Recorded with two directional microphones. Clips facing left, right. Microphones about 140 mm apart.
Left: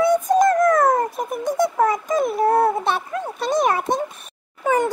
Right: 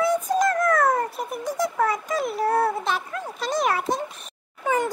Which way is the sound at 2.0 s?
50° left (ahead or behind).